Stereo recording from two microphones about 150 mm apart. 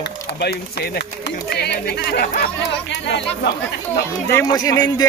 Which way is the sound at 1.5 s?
90° left.